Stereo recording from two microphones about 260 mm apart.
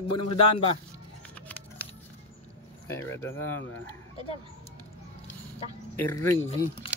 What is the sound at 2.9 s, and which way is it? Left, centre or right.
Speech, centre.